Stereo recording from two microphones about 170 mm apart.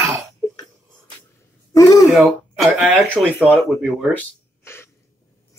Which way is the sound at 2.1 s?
Centre (ahead or behind).